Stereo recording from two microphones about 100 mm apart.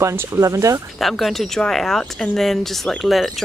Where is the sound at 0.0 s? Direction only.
25° right (ahead or behind).